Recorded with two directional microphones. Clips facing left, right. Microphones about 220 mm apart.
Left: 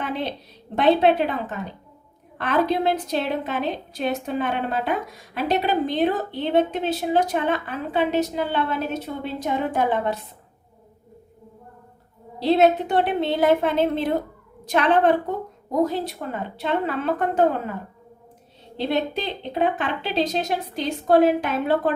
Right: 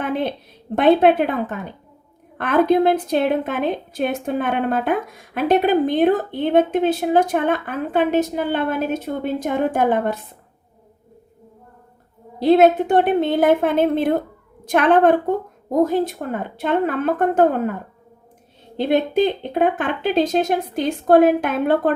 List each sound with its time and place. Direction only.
0.0 s a sound: 50° right (ahead or behind)
0.8 s a woman's voice: 50° right (ahead or behind)
12.4 s a woman's voice: 50° right (ahead or behind)
18.8 s a woman's voice: 50° right (ahead or behind)